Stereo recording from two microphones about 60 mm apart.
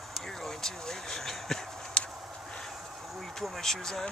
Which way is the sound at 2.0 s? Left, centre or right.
Centre.